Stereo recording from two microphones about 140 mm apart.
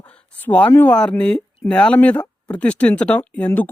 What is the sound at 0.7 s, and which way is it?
Speech, 10° left (ahead or behind).